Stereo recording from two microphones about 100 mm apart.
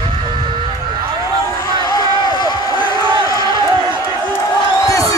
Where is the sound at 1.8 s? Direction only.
45° left (ahead or behind).